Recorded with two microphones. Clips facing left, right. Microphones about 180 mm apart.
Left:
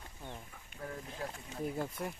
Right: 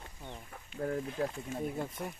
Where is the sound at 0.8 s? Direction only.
45° right (ahead or behind).